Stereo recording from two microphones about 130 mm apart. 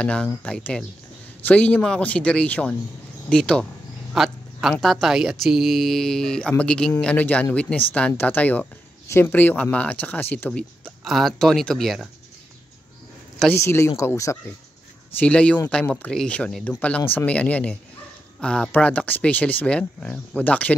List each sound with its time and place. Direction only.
0.0 s speech: 10° left (ahead or behind)
11.1 s speech: centre (ahead or behind)
13.6 s speech: 20° left (ahead or behind)
15.1 s speech: 10° left (ahead or behind)